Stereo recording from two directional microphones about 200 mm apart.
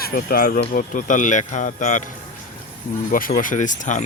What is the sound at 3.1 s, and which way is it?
Speech, 45° left (ahead or behind).